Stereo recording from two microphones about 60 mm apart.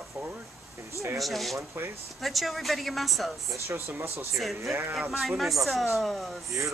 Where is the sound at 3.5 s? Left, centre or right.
Right.